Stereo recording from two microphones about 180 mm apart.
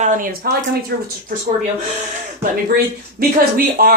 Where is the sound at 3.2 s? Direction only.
55° right (ahead or behind).